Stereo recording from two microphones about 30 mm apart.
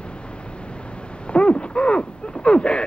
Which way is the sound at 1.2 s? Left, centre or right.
Left.